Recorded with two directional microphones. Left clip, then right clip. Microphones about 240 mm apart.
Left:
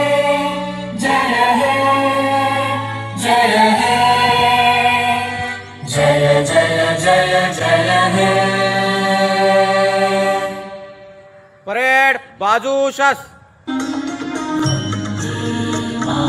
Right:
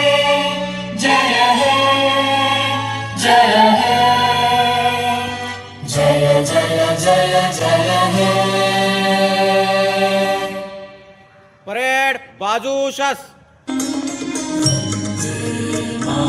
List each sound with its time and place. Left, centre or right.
0.9 s music: centre; by 10.5 s right
11.7 s a sound: centre
13.7 s music: right